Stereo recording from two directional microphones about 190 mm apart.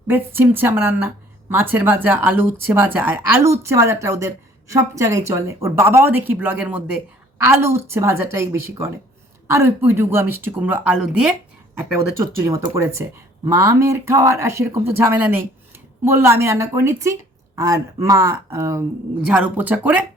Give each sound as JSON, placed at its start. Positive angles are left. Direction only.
{"t": 0.1, "sound": "a woman's voice", "side_deg": -10}
{"t": 11.8, "sound": "a woman's voice", "side_deg": -15}